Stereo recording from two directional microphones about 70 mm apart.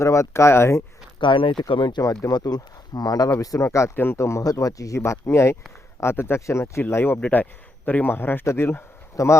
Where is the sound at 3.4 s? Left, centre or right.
Left.